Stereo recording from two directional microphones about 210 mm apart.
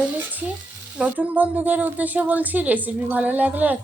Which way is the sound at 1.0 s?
5° right (ahead or behind).